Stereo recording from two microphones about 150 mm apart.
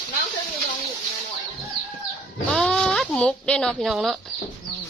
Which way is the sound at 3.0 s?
5° left (ahead or behind).